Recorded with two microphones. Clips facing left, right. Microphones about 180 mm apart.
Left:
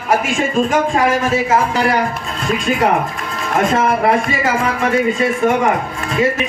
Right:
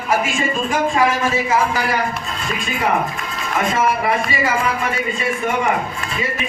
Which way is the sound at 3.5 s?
55° left (ahead or behind).